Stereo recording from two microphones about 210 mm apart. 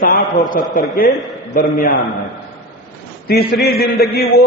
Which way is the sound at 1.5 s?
45° left (ahead or behind).